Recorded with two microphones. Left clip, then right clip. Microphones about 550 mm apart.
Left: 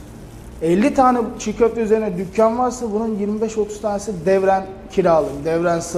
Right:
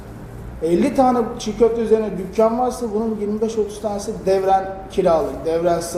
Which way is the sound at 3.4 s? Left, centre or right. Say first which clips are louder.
Even; left.